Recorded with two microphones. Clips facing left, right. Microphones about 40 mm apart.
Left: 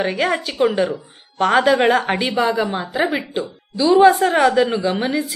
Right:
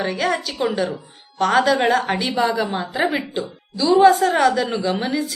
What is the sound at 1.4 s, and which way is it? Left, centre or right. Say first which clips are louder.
A woman's voice: left 2 dB; centre.